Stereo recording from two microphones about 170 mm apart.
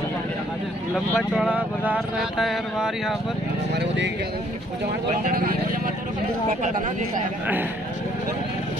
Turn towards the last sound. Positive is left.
turn(degrees=-10)  # may be behind; listen again after turning